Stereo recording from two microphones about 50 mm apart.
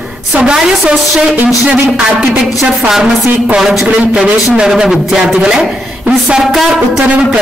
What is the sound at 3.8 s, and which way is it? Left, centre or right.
A man's voice, centre.